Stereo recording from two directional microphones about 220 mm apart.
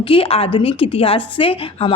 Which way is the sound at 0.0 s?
25° left (ahead or behind).